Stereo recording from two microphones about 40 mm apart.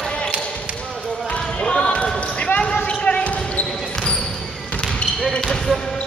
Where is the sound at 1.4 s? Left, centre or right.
Left.